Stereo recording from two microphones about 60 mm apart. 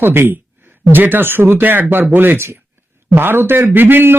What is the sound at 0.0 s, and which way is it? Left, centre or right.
A man's voice, right.